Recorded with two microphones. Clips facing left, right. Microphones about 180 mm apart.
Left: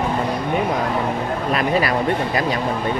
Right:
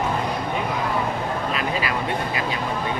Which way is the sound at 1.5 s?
45° left (ahead or behind).